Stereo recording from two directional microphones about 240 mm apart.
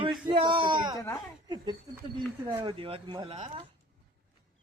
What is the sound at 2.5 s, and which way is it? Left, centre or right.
Speech, right.